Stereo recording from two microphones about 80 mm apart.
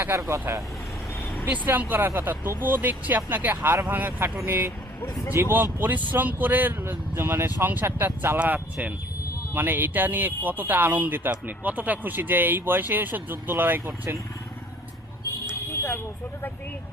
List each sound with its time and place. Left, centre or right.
0.2 s speech: right
1.5 s speech: right
15.7 s a sound: left